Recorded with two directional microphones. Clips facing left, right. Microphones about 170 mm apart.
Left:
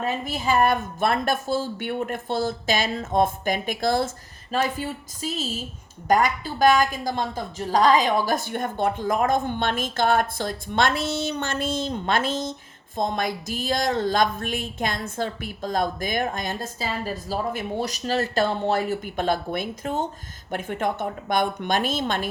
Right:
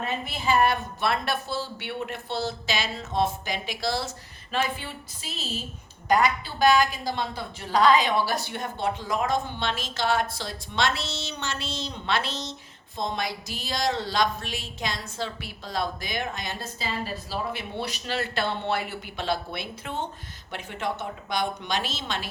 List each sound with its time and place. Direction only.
0.0 s speech: 45° left (ahead or behind)